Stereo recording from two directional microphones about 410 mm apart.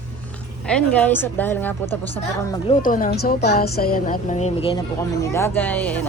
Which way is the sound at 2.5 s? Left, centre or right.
Centre.